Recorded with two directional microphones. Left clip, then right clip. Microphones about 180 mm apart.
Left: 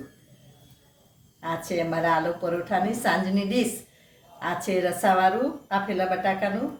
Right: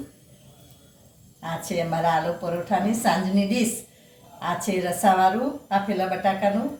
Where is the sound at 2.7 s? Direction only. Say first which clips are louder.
Right 2 dB; 25° left (ahead or behind).